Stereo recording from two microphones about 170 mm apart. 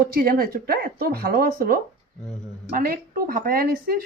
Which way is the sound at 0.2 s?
60° right (ahead or behind).